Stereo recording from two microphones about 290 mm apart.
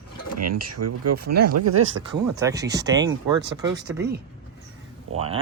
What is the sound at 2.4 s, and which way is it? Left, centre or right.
Speech, centre.